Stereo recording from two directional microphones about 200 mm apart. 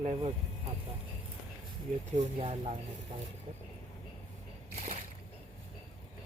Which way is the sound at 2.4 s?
30° right (ahead or behind).